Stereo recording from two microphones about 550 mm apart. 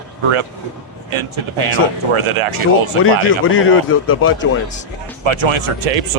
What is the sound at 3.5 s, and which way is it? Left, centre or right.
Speech, left.